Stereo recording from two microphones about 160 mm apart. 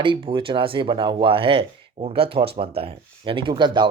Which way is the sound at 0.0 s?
30° right (ahead or behind).